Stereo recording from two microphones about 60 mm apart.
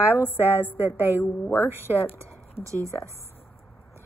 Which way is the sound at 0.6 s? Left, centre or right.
Left.